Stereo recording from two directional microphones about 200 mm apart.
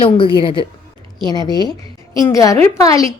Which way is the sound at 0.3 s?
25° left (ahead or behind).